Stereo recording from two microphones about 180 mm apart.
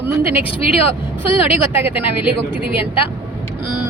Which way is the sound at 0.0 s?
10° right (ahead or behind).